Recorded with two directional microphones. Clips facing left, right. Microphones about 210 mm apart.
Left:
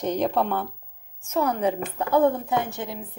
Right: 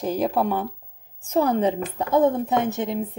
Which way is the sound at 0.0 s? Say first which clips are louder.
Right 1 dB; 5° right (ahead or behind).